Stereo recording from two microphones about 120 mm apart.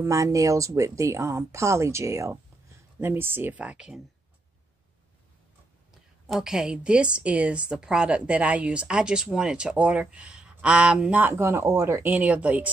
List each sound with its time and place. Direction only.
0.0 s a woman's voice: 25° right (ahead or behind); by 4.0 s 5° right (ahead or behind)
6.2 s a woman's voice: 5° right (ahead or behind)